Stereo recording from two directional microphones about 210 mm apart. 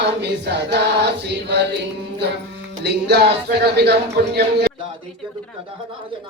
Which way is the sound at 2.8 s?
50° right (ahead or behind).